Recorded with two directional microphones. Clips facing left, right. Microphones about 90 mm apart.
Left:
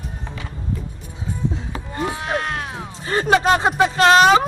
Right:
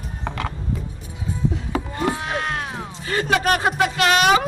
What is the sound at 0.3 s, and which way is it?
Music, 70° right (ahead or behind).